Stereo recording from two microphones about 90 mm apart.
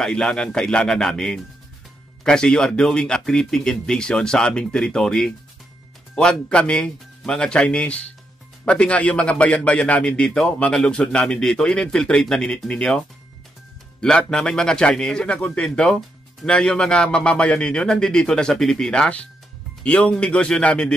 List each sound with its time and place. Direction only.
0.0 s a man's voice: 5° left (ahead or behind)
14.0 s a man's voice: 10° left (ahead or behind)